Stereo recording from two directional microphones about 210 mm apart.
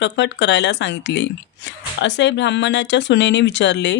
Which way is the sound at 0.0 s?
55° left (ahead or behind).